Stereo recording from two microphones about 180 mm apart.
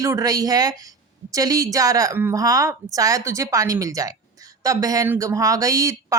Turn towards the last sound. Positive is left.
turn(degrees=-20)  # may be behind; listen again after turning